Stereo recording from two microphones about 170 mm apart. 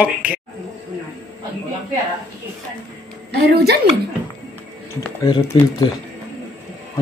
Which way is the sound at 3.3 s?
70° right (ahead or behind).